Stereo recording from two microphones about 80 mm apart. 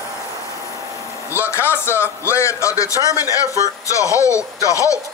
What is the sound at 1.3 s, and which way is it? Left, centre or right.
A man's voice, left.